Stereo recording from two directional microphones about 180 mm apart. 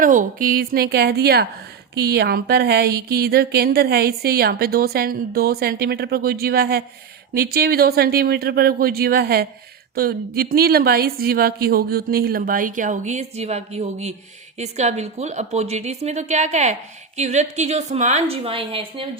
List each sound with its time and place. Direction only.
0.0 s a woman's voice: 45° right (ahead or behind); by 19.0 s 30° right (ahead or behind)